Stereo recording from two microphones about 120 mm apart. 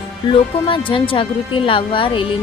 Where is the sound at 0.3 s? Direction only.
45° left (ahead or behind).